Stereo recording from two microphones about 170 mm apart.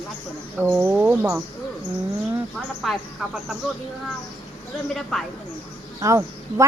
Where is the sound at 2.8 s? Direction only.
Centre (ahead or behind).